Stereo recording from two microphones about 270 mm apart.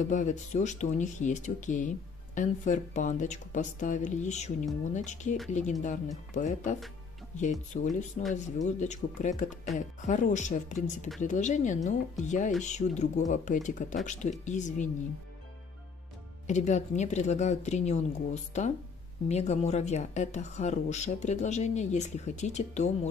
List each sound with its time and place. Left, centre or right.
0.1 s speech: left
16.4 s speech: left